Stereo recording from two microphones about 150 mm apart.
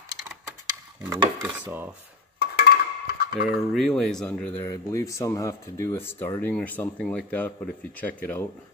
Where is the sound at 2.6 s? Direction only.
90° left.